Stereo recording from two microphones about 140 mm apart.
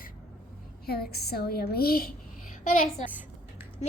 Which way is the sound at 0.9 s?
90° left.